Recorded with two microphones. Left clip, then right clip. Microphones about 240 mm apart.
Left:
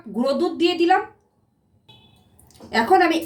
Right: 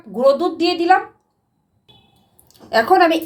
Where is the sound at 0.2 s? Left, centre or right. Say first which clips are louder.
Right 6 dB; right.